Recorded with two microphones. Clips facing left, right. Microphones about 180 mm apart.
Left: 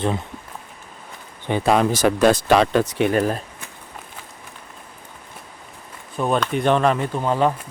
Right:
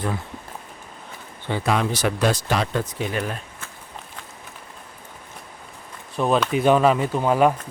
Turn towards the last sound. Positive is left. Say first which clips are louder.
# right 2 dB
turn(degrees=-10)  # may be behind; listen again after turning